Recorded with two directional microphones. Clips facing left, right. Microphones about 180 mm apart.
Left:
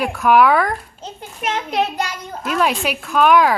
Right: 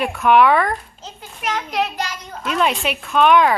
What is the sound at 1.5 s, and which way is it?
Speech, 30° left (ahead or behind).